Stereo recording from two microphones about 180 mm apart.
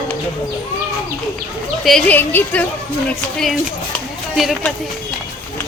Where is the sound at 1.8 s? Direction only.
5° left (ahead or behind).